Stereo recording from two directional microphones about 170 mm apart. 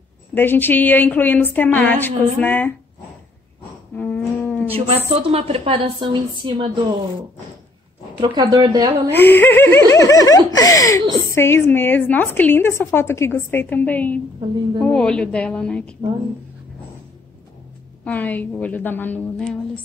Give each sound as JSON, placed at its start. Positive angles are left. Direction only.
{"t": 0.3, "sound": "a woman's voice", "side_deg": 10}
{"t": 3.9, "sound": "a sound", "side_deg": 10}
{"t": 4.7, "sound": "a woman's voice", "side_deg": -35}
{"t": 8.2, "sound": "speech", "side_deg": -25}
{"t": 9.1, "sound": "a woman's voice", "side_deg": 10}
{"t": 18.0, "sound": "a woman's voice", "side_deg": 10}